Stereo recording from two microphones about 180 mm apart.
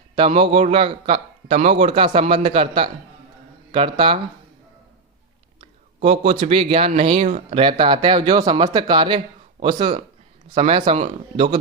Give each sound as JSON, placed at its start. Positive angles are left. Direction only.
{"t": 0.2, "sound": "a man's voice", "side_deg": -30}
{"t": 5.5, "sound": "a man's voice", "side_deg": -35}